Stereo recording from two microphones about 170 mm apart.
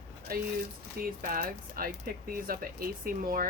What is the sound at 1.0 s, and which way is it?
Speech, 55° right (ahead or behind).